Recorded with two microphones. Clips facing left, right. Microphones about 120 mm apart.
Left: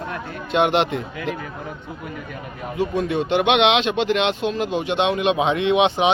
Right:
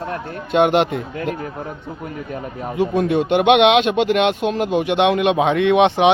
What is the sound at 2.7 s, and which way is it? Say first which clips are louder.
Speech: right 4 dB; 55° right (ahead or behind).